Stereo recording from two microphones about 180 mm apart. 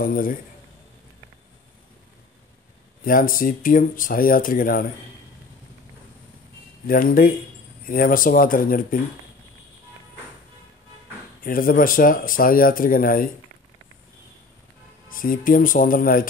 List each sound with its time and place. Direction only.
0.0 s speech: 50° left (ahead or behind)
3.0 s speech: 50° left (ahead or behind)
6.9 s speech: 50° left (ahead or behind)
11.4 s speech: 50° left (ahead or behind)
15.0 s speech: 50° left (ahead or behind)